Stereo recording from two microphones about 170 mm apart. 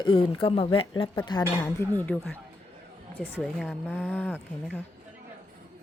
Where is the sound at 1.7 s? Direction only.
10° left (ahead or behind).